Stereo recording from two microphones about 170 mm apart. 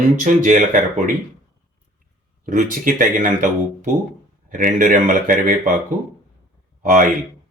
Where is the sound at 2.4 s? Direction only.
50° right (ahead or behind).